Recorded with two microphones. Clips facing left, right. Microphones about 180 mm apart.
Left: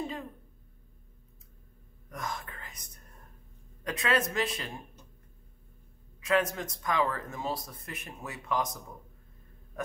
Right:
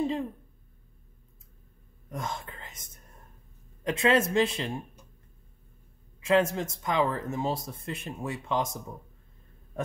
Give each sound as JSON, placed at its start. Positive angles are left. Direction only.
{"t": 2.0, "sound": "whispering", "side_deg": -25}
{"t": 3.8, "sound": "speech", "side_deg": -25}
{"t": 6.2, "sound": "speech", "side_deg": -25}